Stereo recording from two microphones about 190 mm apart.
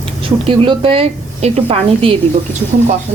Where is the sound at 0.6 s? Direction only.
30° right (ahead or behind).